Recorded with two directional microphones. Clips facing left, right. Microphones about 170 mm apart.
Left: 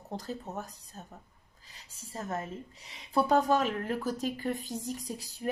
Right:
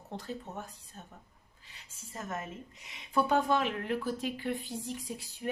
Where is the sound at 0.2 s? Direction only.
40° left (ahead or behind).